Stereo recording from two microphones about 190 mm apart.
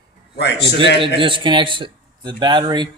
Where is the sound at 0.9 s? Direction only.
30° right (ahead or behind).